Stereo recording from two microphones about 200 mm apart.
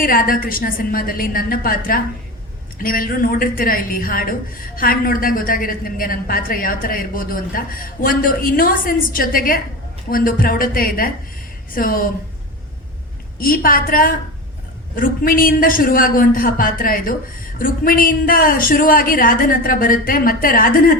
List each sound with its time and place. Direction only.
0.0 s a woman's voice: 45° left (ahead or behind)
13.4 s a woman's voice: 45° left (ahead or behind)